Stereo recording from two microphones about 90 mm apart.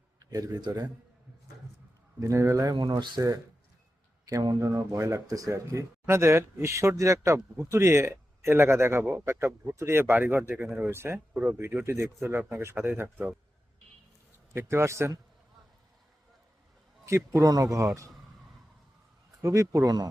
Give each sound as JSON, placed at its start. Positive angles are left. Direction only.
{"t": 0.3, "sound": "a man's voice", "side_deg": -45}
{"t": 2.2, "sound": "speech", "side_deg": -35}
{"t": 14.5, "sound": "speech", "side_deg": -30}
{"t": 17.1, "sound": "speech", "side_deg": -30}
{"t": 19.4, "sound": "speech", "side_deg": -35}